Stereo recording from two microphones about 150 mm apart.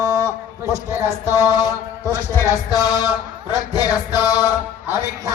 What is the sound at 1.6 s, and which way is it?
Music, 15° left (ahead or behind).